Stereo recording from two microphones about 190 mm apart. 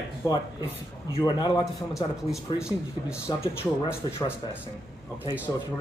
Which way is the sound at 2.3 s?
5° right (ahead or behind).